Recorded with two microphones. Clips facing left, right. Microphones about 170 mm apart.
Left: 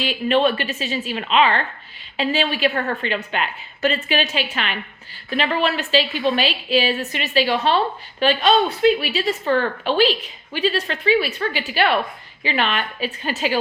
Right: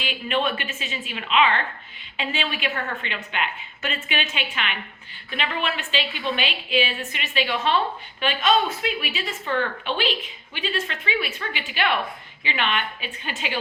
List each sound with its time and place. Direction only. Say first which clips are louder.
0.0 s a woman's voice: left 7 dB; 35° left (ahead or behind)